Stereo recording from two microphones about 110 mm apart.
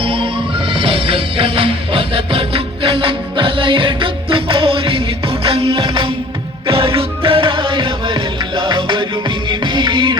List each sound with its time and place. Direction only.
0.0 s music: 55° right (ahead or behind)